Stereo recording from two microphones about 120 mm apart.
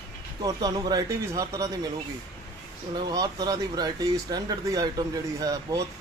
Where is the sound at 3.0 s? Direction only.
35° right (ahead or behind).